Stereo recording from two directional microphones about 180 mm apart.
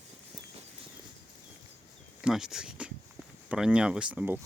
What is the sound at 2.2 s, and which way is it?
Speech, centre (ahead or behind).